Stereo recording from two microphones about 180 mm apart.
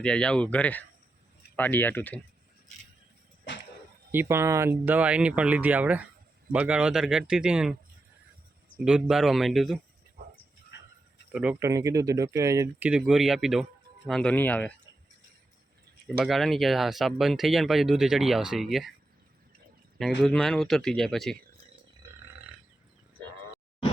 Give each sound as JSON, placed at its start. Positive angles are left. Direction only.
{"t": 0.0, "sound": "speech", "side_deg": 5}
{"t": 4.1, "sound": "speech", "side_deg": -15}
{"t": 8.8, "sound": "speech", "side_deg": -5}
{"t": 11.3, "sound": "speech", "side_deg": -5}
{"t": 11.6, "sound": "speech", "side_deg": -15}
{"t": 12.9, "sound": "speech", "side_deg": -5}
{"t": 16.0, "sound": "speech", "side_deg": 0}
{"t": 20.0, "sound": "speech", "side_deg": 0}